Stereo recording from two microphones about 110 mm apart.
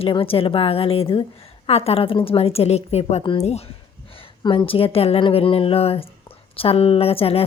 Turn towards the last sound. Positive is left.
turn(degrees=60)  # may be behind; listen again after turning